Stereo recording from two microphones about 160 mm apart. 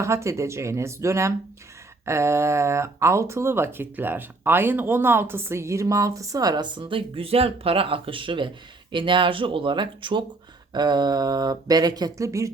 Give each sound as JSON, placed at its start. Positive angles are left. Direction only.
{"t": 0.0, "sound": "speech", "side_deg": -15}